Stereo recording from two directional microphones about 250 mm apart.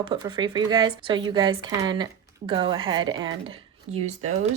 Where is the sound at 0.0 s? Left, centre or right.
Centre.